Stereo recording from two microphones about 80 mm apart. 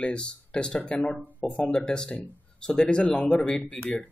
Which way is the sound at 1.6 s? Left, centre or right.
Centre.